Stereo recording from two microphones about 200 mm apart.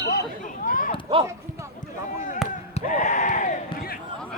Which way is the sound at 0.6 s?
45° left (ahead or behind).